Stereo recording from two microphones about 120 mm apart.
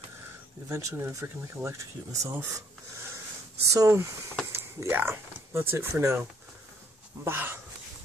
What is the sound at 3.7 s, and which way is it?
Speech, 25° right (ahead or behind).